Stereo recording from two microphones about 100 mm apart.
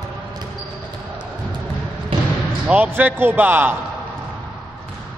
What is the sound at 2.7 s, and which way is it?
A man's voice, 15° right (ahead or behind).